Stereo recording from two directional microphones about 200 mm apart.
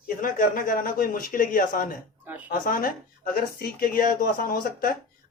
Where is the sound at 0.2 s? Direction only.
45° left (ahead or behind).